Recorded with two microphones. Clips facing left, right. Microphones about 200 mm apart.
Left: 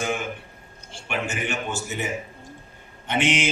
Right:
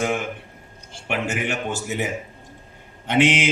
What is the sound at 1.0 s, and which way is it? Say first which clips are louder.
Speech: right 3 dB; 65° right (ahead or behind).